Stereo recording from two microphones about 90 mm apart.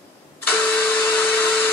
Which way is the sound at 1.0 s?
15° left (ahead or behind).